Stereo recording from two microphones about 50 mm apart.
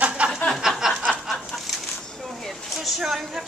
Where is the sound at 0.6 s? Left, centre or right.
Centre.